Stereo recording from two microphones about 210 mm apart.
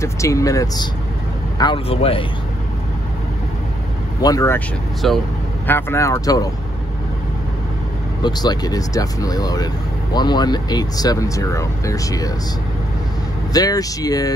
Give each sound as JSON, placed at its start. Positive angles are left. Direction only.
{"t": 0.0, "sound": "speech", "side_deg": 15}
{"t": 4.2, "sound": "speech", "side_deg": 15}
{"t": 5.0, "sound": "speech", "side_deg": 0}
{"t": 5.7, "sound": "speech", "side_deg": 10}
{"t": 8.2, "sound": "speech", "side_deg": 20}
{"t": 13.5, "sound": "speech", "side_deg": 15}